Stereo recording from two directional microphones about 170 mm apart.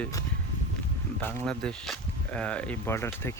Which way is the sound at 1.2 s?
10° left (ahead or behind).